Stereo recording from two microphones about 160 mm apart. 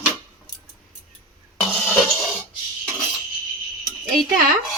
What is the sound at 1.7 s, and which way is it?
Music, 5° left (ahead or behind).